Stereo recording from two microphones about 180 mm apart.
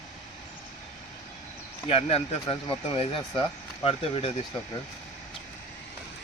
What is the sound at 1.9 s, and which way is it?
Speech, 35° left (ahead or behind).